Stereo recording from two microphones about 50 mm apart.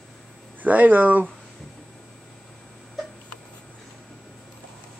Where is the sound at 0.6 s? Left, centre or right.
Right.